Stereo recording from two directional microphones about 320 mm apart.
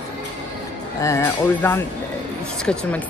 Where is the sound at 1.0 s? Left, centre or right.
Centre.